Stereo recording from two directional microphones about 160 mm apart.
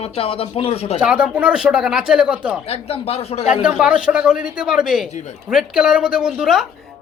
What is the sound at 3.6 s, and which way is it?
Speech, 5° right (ahead or behind).